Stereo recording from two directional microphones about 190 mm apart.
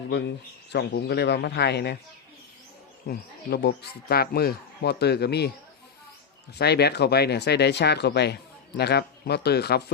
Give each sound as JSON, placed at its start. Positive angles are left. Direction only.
{"t": 0.1, "sound": "speech", "side_deg": 65}
{"t": 3.1, "sound": "speech", "side_deg": 55}
{"t": 6.6, "sound": "speech", "side_deg": 60}